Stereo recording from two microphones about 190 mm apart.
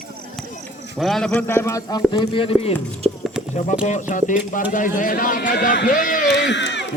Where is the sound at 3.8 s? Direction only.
40° left (ahead or behind).